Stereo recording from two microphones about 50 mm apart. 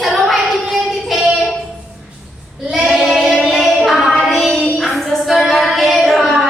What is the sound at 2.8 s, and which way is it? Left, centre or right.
Child singing, centre.